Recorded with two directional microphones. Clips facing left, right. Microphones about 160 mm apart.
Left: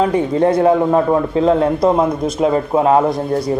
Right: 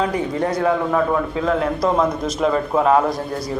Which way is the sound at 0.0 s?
25° left (ahead or behind).